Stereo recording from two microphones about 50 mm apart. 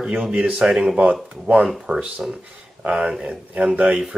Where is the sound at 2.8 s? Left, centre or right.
Right.